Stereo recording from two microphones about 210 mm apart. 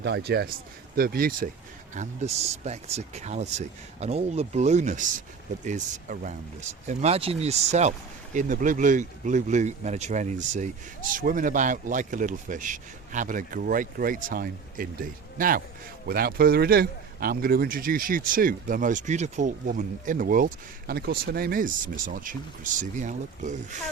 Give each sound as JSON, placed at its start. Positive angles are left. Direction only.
{"t": 0.0, "sound": "a man's voice", "side_deg": -50}
{"t": 2.0, "sound": "a man's voice", "side_deg": -30}